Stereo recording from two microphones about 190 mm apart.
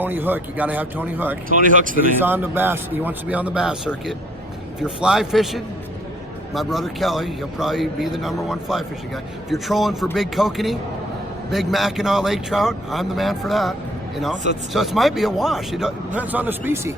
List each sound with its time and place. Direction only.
0.0 s a man's voice: 10° right (ahead or behind)
1.5 s speech: 45° right (ahead or behind)
2.1 s a man's voice: 10° right (ahead or behind)